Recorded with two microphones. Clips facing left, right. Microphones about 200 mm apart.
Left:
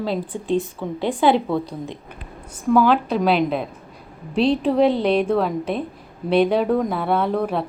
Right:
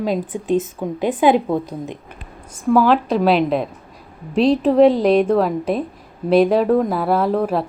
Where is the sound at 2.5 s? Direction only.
5° right (ahead or behind).